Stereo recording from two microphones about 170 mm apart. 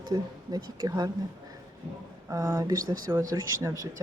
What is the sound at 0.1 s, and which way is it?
Speech, 20° right (ahead or behind).